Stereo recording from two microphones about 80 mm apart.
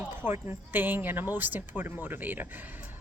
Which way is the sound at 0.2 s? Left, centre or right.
Right.